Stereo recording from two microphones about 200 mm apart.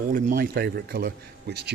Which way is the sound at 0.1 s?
45° right (ahead or behind).